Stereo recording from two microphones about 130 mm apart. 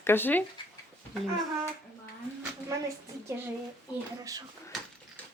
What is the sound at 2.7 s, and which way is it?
A woman's voice, 20° right (ahead or behind).